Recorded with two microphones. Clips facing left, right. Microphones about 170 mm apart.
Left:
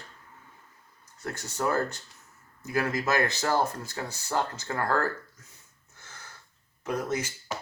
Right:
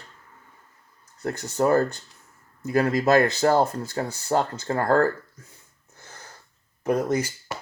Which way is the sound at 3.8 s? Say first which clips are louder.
Right 7 dB; 55° right (ahead or behind).